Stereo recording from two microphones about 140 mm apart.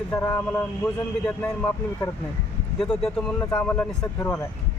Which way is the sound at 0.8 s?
5° left (ahead or behind).